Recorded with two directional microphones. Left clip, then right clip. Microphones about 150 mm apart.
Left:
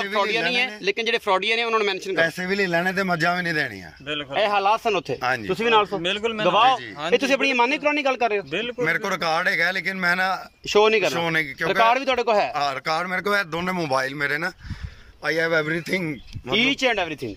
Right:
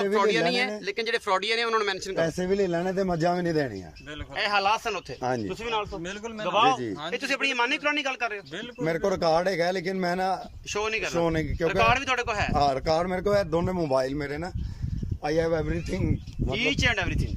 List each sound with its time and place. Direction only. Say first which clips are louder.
0.0 s a man's voice: left 1 dB; 15° left (ahead or behind)
2.4 s a man's voice: left 2 dB; 30° right (ahead or behind)
2.7 s speech: left 6 dB; 10° right (ahead or behind)
3.0 s a man's voice: left 4 dB; 35° right (ahead or behind)
4.4 s speech: left 4 dB; 25° left (ahead or behind)
6.0 s a man's voice: left 11 dB; 5° left (ahead or behind)
6.4 s speech: left 4 dB; 25° left (ahead or behind)
8.8 s a man's voice: even; 35° right (ahead or behind)
10.7 s speech: left 11 dB; 25° left (ahead or behind)
11.1 s a man's voice: left 3 dB; 30° right (ahead or behind)
11.6 s speech: left 3 dB; 30° left (ahead or behind)
12.5 s a man's voice: even; 30° right (ahead or behind); by 16.0 s 15° right (ahead or behind)
16.5 s speech: left 5 dB; 20° left (ahead or behind)